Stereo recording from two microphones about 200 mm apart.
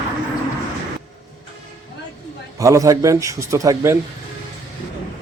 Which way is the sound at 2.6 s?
15° right (ahead or behind).